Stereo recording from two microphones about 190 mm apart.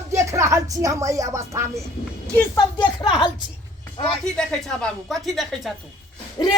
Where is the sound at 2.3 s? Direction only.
20° left (ahead or behind).